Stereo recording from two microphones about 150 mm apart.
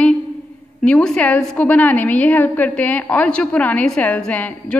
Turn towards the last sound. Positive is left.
turn(degrees=10)  # may be behind; listen again after turning